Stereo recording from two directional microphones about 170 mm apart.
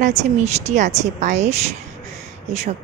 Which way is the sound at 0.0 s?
40° right (ahead or behind).